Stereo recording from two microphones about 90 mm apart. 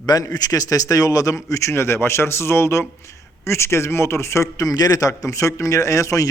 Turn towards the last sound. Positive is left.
turn(degrees=35)  # may be behind; listen again after turning